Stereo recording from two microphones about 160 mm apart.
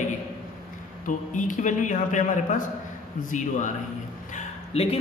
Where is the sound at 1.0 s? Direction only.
50° left (ahead or behind).